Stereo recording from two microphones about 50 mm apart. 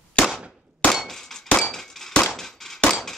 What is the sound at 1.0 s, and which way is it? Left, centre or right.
Clang, centre.